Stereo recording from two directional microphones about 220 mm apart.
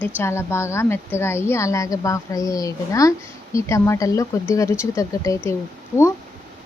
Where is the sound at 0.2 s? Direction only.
10° left (ahead or behind).